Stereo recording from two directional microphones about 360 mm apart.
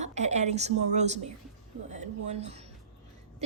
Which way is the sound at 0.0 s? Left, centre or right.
Centre.